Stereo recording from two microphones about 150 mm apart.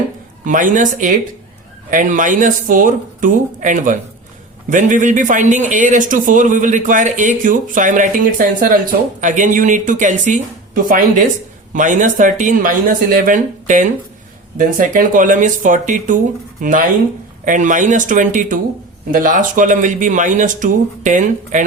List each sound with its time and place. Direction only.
0.4 s speech: 60° right (ahead or behind)